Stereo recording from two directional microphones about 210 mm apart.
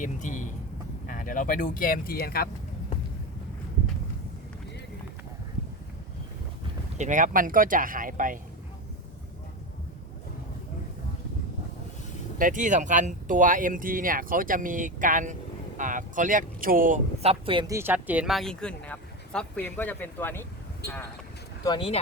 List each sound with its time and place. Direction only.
0.0 s speech: 35° left (ahead or behind)
7.0 s speech: 35° right (ahead or behind)
12.4 s speech: 40° right (ahead or behind)
17.4 s speech: 25° right (ahead or behind); by 20.5 s 10° left (ahead or behind)
20.8 s speech: 50° left (ahead or behind)
21.6 s speech: 20° left (ahead or behind)